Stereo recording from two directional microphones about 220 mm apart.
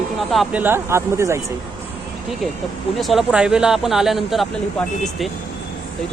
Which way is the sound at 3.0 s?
Centre (ahead or behind).